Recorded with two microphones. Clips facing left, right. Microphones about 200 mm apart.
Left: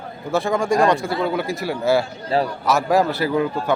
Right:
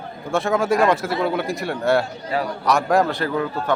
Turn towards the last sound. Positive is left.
turn(degrees=10)  # may be behind; listen again after turning